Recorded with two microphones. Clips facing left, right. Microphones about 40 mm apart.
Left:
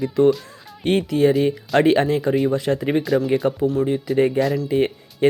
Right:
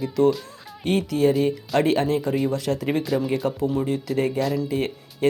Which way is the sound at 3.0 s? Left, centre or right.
Centre.